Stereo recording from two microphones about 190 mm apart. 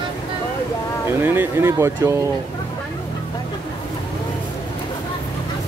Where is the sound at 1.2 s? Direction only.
10° right (ahead or behind).